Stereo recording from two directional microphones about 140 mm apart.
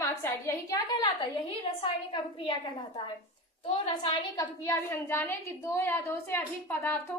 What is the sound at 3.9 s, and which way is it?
A woman's voice, 25° left (ahead or behind).